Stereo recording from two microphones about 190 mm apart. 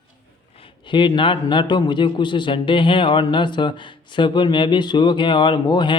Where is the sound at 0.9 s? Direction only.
25° left (ahead or behind).